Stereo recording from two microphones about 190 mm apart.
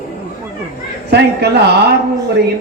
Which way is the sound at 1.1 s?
60° right (ahead or behind).